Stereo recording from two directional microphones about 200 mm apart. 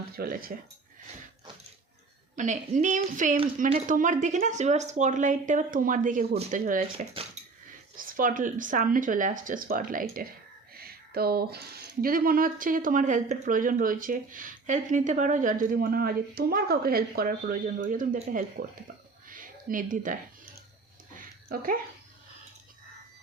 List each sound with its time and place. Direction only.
0.2 s speech: 45° right (ahead or behind)
2.3 s speech: 40° right (ahead or behind)
7.4 s dog: 35° right (ahead or behind)
7.9 s speech: 45° right (ahead or behind)
10.8 s a sound: 50° right (ahead or behind)
12.0 s speech: 45° right (ahead or behind)
19.3 s a sound: 45° right (ahead or behind)
21.5 s speech: 45° right (ahead or behind)